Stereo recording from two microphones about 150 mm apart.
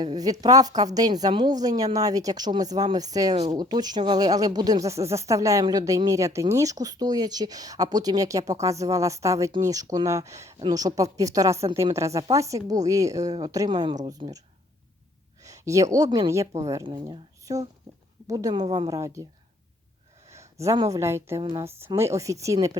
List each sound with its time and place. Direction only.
0.0 s speech: 25° right (ahead or behind)
3.3 s speech: 45° right (ahead or behind)
3.6 s speech: 25° right (ahead or behind)
16.8 s speech: 30° right (ahead or behind)
20.3 s speech: 20° right (ahead or behind)